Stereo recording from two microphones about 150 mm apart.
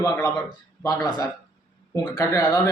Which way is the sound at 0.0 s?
25° left (ahead or behind).